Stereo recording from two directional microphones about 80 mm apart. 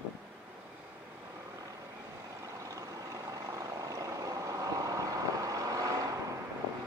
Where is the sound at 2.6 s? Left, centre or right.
Right.